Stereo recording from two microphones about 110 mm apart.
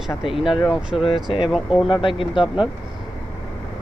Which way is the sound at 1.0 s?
50° left (ahead or behind).